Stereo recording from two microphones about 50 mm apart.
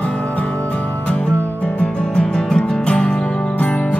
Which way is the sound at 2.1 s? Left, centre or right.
Centre.